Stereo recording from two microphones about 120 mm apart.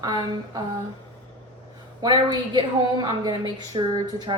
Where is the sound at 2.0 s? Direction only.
35° right (ahead or behind).